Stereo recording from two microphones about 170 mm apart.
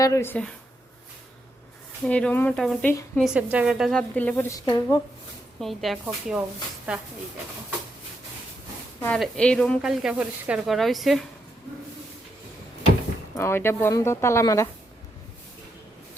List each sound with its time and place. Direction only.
0.0 s speech: 15° left (ahead or behind)
2.0 s speech: 5° left (ahead or behind)
4.6 s speech: 25° left (ahead or behind)
5.5 s speech: centre (ahead or behind)
9.0 s speech: 10° left (ahead or behind)
13.3 s speech: 15° left (ahead or behind)